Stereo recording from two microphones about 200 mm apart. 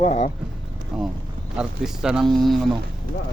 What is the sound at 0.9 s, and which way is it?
Speech, centre (ahead or behind).